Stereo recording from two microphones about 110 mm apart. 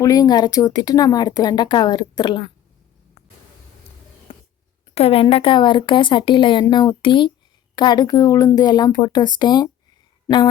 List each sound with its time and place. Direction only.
0.0 s speech: 35° left (ahead or behind)
4.3 s a sound: 55° left (ahead or behind)
4.9 s speech: 60° left (ahead or behind); by 10.5 s 40° left (ahead or behind)